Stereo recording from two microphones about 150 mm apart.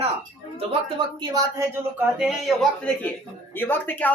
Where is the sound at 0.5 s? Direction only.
35° right (ahead or behind); by 2.1 s 20° right (ahead or behind).